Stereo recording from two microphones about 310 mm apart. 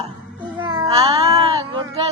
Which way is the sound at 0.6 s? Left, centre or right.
Centre.